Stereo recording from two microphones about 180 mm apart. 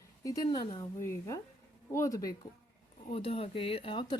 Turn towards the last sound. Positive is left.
turn(degrees=25)  # may be behind; listen again after turning